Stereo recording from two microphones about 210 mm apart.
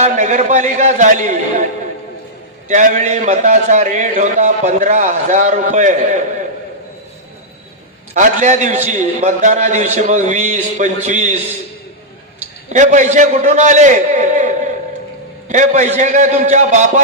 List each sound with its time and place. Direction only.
0.0 s a man's voice: 35° right (ahead or behind)
2.6 s a man's voice: 35° right (ahead or behind)
8.1 s a man's voice: 35° right (ahead or behind)
12.6 s a man's voice: 35° right (ahead or behind)